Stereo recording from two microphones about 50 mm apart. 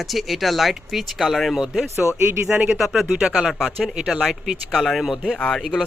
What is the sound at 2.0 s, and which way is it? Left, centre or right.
Speech, left.